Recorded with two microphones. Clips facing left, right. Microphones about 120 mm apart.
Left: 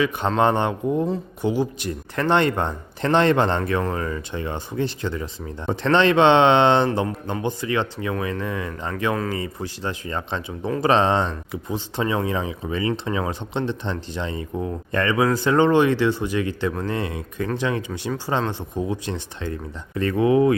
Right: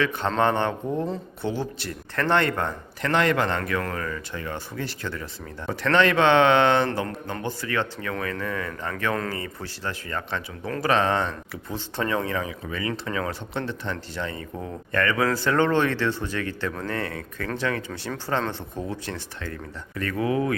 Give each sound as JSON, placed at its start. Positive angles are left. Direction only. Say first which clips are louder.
{"t": 0.0, "sound": "speech", "louder": "left 3 dB", "side_deg": 15}